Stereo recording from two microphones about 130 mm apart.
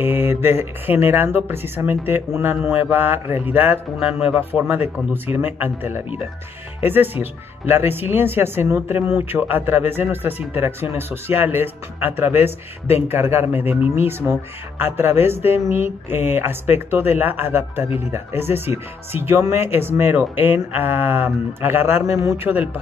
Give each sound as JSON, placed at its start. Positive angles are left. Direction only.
{"t": 0.0, "sound": "speech", "side_deg": -15}